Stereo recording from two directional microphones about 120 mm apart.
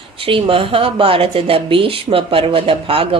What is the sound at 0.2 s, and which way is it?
A woman's voice, 50° right (ahead or behind).